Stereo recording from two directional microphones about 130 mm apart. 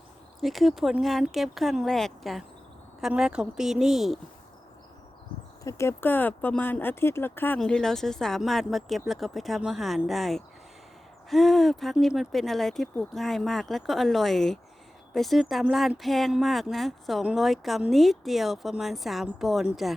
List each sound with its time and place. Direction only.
0.4 s speech: centre (ahead or behind)
5.6 s speech: 20° left (ahead or behind)
7.6 s speech: 5° left (ahead or behind)